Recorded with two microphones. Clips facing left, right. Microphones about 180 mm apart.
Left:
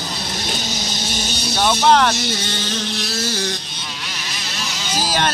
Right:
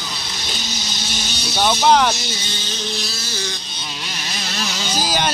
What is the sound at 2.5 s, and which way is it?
Motorboat, 70° left (ahead or behind).